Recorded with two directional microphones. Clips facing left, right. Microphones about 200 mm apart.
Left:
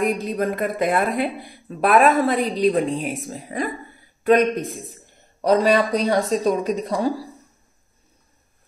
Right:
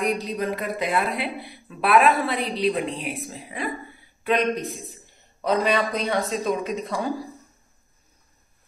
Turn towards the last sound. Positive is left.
turn(degrees=40)  # may be behind; listen again after turning